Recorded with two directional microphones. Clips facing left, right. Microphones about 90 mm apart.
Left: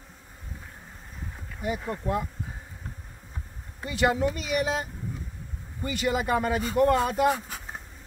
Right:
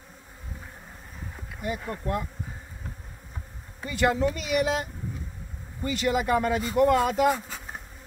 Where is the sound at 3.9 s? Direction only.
15° left (ahead or behind).